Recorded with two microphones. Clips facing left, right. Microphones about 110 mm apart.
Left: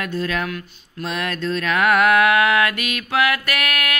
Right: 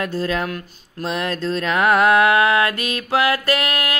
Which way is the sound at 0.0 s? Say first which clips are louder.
Right 2 dB; 30° right (ahead or behind).